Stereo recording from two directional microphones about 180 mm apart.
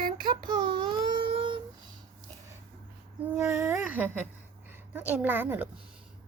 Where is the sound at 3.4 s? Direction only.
10° right (ahead or behind).